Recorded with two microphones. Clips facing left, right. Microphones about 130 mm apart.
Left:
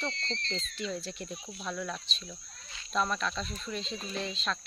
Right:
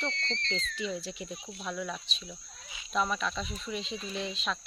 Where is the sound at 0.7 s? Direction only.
10° right (ahead or behind).